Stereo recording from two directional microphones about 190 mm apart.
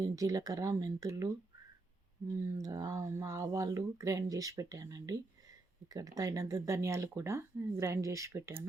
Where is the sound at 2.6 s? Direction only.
20° right (ahead or behind).